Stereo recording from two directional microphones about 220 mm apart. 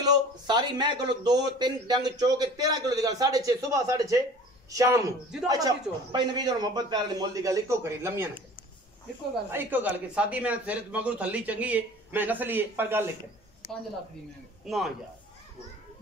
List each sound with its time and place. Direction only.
0.0 s a man's voice: 20° right (ahead or behind)
9.5 s a man's voice: 10° right (ahead or behind)
14.7 s a man's voice: centre (ahead or behind)